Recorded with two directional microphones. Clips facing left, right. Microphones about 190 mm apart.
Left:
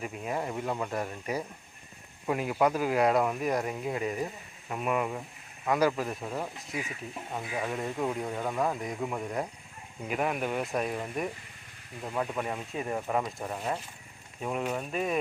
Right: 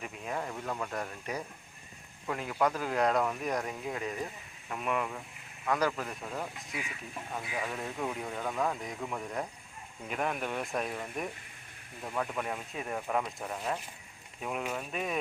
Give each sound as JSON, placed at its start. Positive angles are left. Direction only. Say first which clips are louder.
{"t": 0.0, "sound": "speech", "louder": "left 4 dB", "side_deg": 10}
{"t": 6.7, "sound": "speech", "louder": "left 5 dB", "side_deg": 45}
{"t": 7.3, "sound": "speech", "louder": "left 4 dB", "side_deg": 15}